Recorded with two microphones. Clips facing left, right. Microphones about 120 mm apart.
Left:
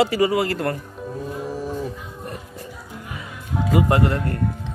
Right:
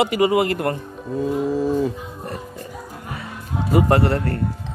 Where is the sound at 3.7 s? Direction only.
35° right (ahead or behind).